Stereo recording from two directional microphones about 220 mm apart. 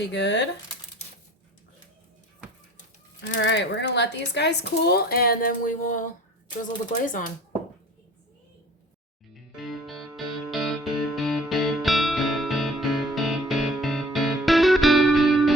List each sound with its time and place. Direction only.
0.1 s speech: 50° left (ahead or behind)
3.2 s speech: 55° left (ahead or behind); by 7.3 s 35° left (ahead or behind)
9.3 s music: centre (ahead or behind)